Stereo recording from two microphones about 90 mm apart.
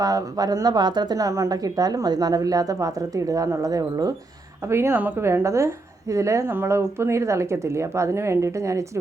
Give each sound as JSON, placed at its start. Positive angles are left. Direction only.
{"t": 0.0, "sound": "speech", "side_deg": -40}
{"t": 4.7, "sound": "speech", "side_deg": -30}